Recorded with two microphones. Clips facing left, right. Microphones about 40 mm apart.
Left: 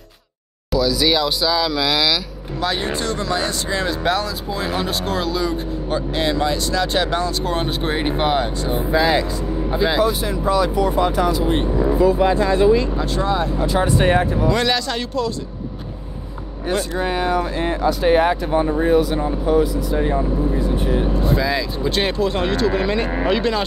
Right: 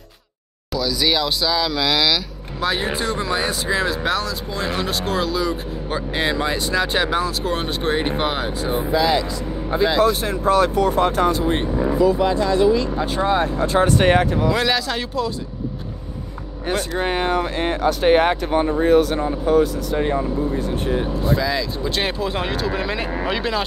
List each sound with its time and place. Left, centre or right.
0.7 s speech: centre
6.1 s speech: centre
8.9 s speech: centre
10.0 s speech: right
12.0 s speech: left
12.9 s speech: centre
13.3 s speech: right
13.8 s speech: right
14.5 s speech: centre
17.0 s speech: right
21.4 s speech: centre